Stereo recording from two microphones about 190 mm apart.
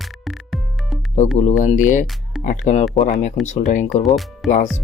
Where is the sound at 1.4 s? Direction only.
40° left (ahead or behind).